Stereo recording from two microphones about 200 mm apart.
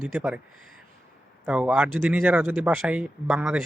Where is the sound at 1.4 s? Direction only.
5° right (ahead or behind).